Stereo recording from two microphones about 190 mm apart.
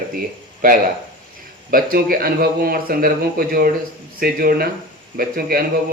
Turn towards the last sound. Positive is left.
turn(degrees=-50)  # may be behind; listen again after turning